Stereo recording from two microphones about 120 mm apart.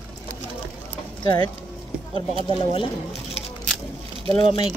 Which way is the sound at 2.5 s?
45° left (ahead or behind).